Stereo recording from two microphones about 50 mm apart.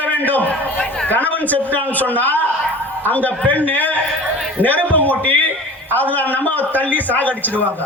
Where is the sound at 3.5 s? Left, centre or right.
Left.